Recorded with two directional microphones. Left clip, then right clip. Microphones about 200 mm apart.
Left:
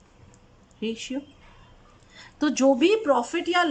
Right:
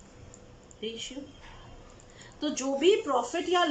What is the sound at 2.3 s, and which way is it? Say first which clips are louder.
Speech: left 10 dB; 55° left (ahead or behind).